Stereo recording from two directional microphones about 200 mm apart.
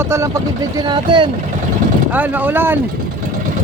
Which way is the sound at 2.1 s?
10° right (ahead or behind).